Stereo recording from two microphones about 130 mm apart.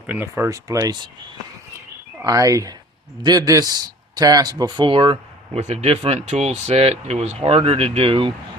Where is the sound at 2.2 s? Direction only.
25° right (ahead or behind).